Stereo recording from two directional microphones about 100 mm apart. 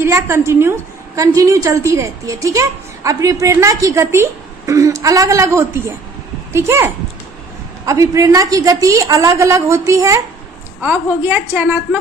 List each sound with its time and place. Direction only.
0.0 s a woman's voice: 30° right (ahead or behind)
10.8 s a woman's voice: 20° right (ahead or behind)